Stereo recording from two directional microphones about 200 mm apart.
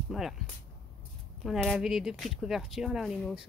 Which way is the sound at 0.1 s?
Centre (ahead or behind).